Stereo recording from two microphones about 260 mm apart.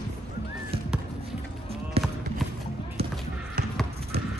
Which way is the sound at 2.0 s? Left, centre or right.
Right.